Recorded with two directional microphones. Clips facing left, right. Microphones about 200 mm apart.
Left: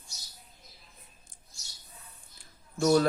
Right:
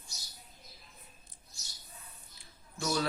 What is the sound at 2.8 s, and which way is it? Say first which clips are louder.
Speech: left 10 dB; 45° left (ahead or behind).